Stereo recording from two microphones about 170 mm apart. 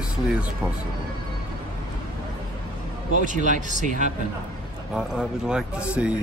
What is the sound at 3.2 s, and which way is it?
Speech, 45° right (ahead or behind).